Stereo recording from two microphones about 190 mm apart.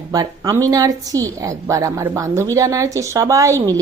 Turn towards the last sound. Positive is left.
turn(degrees=-15)  # may be behind; listen again after turning